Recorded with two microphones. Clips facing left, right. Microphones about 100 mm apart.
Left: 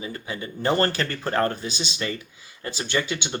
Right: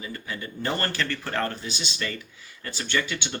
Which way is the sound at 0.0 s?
25° left (ahead or behind).